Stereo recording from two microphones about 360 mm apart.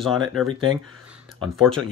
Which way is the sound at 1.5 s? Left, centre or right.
Centre.